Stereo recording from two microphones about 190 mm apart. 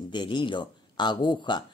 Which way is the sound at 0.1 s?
25° left (ahead or behind).